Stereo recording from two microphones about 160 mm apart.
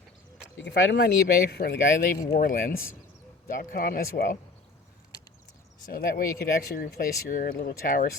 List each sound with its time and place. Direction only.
0.5 s speech: 90° left
2.3 s speech: 60° left (ahead or behind)
5.8 s speech: 65° left (ahead or behind)